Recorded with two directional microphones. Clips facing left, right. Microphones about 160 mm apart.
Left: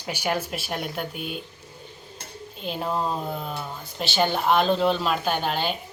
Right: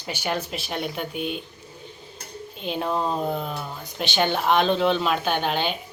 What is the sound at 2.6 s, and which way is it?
Speech, 5° left (ahead or behind).